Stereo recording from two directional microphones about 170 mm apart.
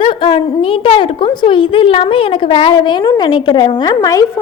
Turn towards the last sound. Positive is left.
turn(degrees=20)  # may be behind; listen again after turning